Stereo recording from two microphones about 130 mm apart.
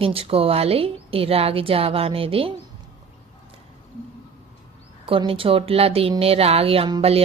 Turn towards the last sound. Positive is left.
turn(degrees=-50)  # may be behind; listen again after turning